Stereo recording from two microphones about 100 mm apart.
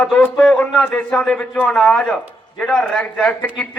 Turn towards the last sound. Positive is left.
turn(degrees=10)  # may be behind; listen again after turning